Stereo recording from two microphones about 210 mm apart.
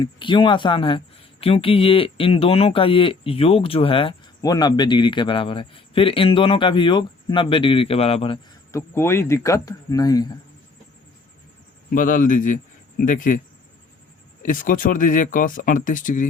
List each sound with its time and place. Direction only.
0.0 s speech: 25° left (ahead or behind)
8.7 s speech: 10° left (ahead or behind)
11.9 s speech: 40° left (ahead or behind)
14.4 s speech: 40° left (ahead or behind)